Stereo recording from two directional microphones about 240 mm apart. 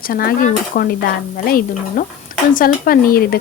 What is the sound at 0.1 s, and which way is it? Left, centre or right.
Speech, left.